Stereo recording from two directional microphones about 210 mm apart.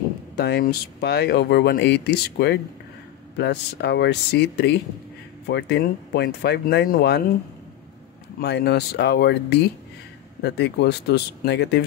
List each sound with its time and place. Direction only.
0.4 s speech: 50° left (ahead or behind)
8.4 s speech: 50° left (ahead or behind)